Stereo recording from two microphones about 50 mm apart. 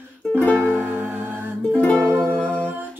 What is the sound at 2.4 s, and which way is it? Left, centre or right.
Humming, left.